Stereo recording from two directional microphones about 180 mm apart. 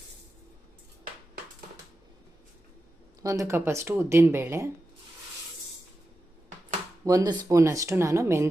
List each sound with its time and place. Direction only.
3.2 s speech: 15° right (ahead or behind)
7.0 s speech: 20° right (ahead or behind)